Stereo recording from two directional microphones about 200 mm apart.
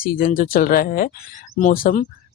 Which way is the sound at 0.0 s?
45° left (ahead or behind).